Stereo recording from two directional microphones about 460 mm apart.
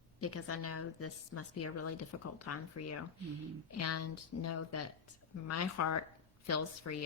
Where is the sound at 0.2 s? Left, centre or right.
Left.